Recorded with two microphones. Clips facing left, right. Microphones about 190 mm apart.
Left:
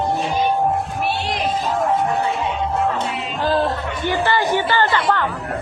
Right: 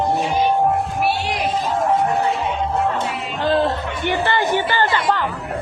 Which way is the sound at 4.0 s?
20° right (ahead or behind).